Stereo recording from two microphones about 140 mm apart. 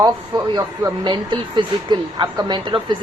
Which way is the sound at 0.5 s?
35° right (ahead or behind).